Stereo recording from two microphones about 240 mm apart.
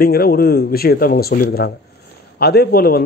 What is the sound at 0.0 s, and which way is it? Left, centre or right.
Speech, left.